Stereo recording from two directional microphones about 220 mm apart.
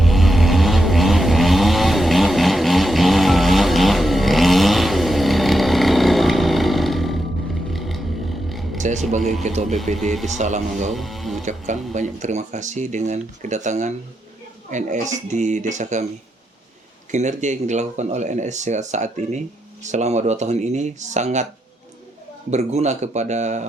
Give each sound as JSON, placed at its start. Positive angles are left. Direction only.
{"t": 0.0, "sound": "vehicle", "side_deg": 0}
{"t": 8.8, "sound": "a sound", "side_deg": -35}
{"t": 9.4, "sound": "speech", "side_deg": -30}
{"t": 9.9, "sound": "speech", "side_deg": 0}
{"t": 10.2, "sound": "speech", "side_deg": -35}
{"t": 10.9, "sound": "speech", "side_deg": 0}
{"t": 11.4, "sound": "speech", "side_deg": -35}
{"t": 17.1, "sound": "speech", "side_deg": -35}
{"t": 22.4, "sound": "speech", "side_deg": -30}